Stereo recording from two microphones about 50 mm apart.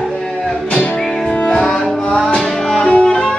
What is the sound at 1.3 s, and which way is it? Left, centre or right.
Music, left.